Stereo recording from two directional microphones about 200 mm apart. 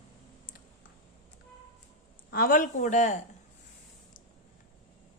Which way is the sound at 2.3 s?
45° left (ahead or behind).